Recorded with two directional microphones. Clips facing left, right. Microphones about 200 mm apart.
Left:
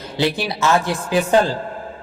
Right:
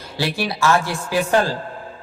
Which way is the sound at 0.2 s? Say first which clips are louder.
Left 2 dB; 20° left (ahead or behind).